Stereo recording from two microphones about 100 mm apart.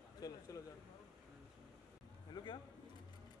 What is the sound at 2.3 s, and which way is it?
Speech, 50° left (ahead or behind).